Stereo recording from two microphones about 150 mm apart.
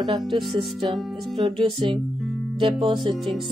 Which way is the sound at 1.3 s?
40° right (ahead or behind).